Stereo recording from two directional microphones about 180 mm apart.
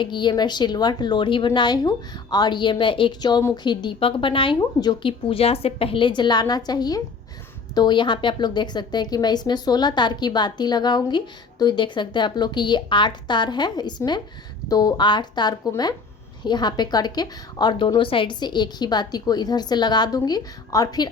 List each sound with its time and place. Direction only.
0.0 s a woman's voice: 25° left (ahead or behind)